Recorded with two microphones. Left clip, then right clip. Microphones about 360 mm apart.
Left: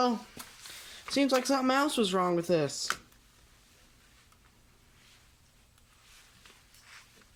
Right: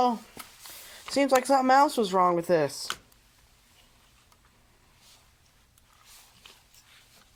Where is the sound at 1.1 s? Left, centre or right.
Centre.